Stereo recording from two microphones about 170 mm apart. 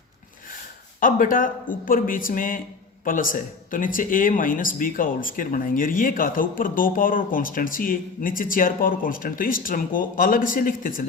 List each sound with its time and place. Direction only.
0.9 s speech: 55° left (ahead or behind)